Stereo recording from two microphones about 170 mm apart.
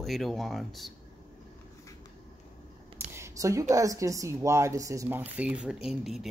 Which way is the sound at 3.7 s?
20° right (ahead or behind).